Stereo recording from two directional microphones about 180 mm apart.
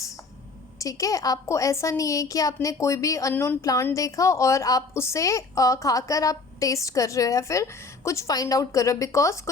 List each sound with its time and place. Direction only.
0.8 s a woman's voice: 20° left (ahead or behind)